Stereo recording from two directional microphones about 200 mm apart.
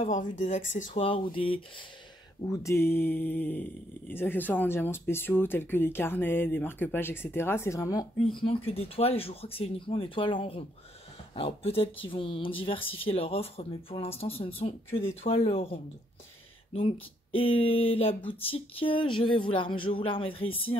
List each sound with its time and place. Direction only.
0.0 s speech: 40° left (ahead or behind)
1.0 s speech: 25° left (ahead or behind)
2.4 s speech: 15° left (ahead or behind)
8.4 s speech: 25° left (ahead or behind)